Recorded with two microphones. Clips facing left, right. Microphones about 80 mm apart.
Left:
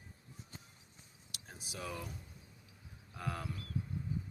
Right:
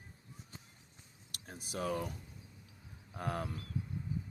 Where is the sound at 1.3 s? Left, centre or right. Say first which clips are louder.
Right 6 dB; right.